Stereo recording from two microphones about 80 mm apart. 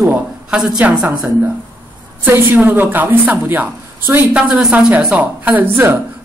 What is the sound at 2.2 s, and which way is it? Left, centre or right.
A woman's voice, right.